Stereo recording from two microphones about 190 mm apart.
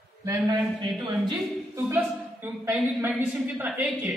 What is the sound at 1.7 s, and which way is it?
A woman's voice, 10° right (ahead or behind).